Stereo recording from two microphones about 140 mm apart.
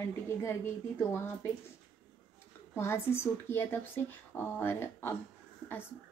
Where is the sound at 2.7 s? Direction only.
15° left (ahead or behind).